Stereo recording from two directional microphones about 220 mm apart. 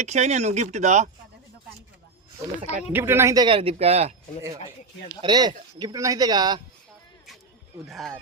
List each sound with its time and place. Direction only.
0.0 s speech: 30° right (ahead or behind)
2.9 s speech: 10° right (ahead or behind); by 4.1 s 30° right (ahead or behind)
5.2 s speech: 20° right (ahead or behind)
7.9 s speech: centre (ahead or behind)